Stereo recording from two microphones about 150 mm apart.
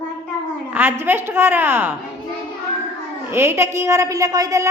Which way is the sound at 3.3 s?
15° right (ahead or behind).